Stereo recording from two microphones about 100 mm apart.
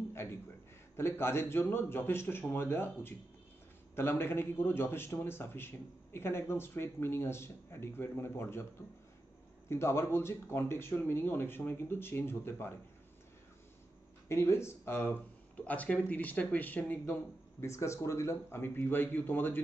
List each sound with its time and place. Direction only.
0.1 s a sound: 25° left (ahead or behind)
0.9 s speech: 25° left (ahead or behind)
9.7 s speech: 25° left (ahead or behind)
14.3 s speech: 25° left (ahead or behind)